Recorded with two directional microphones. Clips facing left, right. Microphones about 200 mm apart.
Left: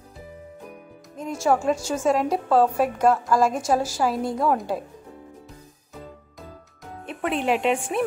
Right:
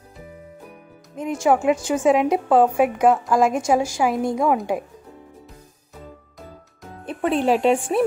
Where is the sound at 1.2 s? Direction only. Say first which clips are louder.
Right 3 dB; 15° right (ahead or behind).